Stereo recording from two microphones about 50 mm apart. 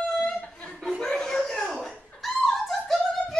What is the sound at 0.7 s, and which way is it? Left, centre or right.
Chuckle, centre.